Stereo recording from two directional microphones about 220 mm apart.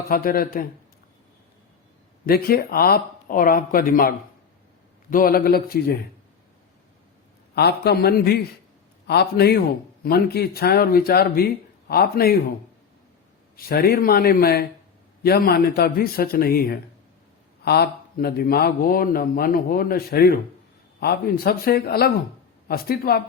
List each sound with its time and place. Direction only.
0.1 s speech: 40° left (ahead or behind)
2.2 s speech: 45° left (ahead or behind)
5.1 s speech: 40° left (ahead or behind)
7.5 s speech: 45° left (ahead or behind)
13.7 s speech: 45° left (ahead or behind)